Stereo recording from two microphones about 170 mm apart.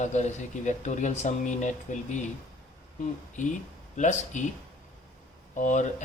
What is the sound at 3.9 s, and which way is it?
Speech, 45° left (ahead or behind).